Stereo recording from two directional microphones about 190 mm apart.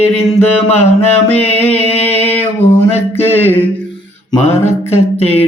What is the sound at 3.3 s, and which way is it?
Mantra, 10° left (ahead or behind).